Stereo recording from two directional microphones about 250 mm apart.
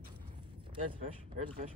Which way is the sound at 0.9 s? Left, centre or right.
Right.